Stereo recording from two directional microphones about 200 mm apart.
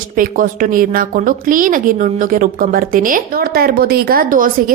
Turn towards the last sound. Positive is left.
turn(degrees=-45)  # may be behind; listen again after turning